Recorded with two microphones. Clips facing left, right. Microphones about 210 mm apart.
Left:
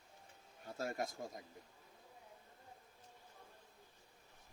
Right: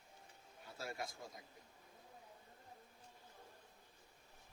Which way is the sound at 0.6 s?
45° left (ahead or behind).